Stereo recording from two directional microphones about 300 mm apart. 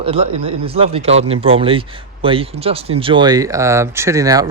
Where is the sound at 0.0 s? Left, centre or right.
Centre.